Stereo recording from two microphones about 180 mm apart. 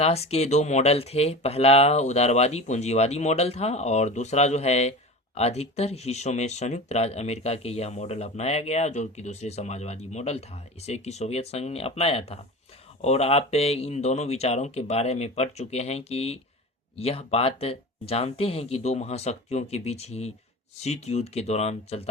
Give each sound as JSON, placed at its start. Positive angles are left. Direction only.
{"t": 0.0, "sound": "speech", "side_deg": 35}